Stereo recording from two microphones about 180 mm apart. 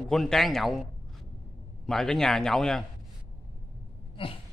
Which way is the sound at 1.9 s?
Centre (ahead or behind).